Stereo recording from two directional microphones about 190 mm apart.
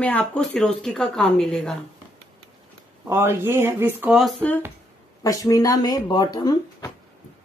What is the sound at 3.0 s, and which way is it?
Speech, 15° right (ahead or behind).